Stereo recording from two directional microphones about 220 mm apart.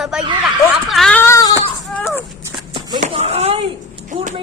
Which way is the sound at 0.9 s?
Centre (ahead or behind).